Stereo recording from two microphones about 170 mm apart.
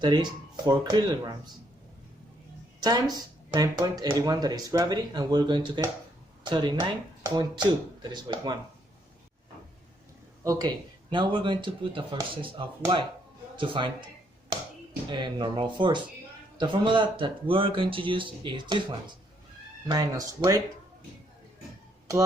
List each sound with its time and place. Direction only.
0.0 s speech: 25° right (ahead or behind)
2.8 s speech: 25° right (ahead or behind)
10.4 s speech: 20° right (ahead or behind)
15.1 s speech: 25° right (ahead or behind)